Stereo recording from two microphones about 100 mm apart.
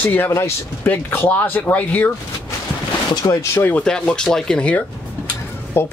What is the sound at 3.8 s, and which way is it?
Speech, 5° left (ahead or behind).